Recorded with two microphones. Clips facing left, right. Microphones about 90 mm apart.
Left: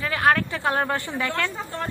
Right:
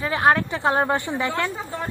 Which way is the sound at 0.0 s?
20° right (ahead or behind).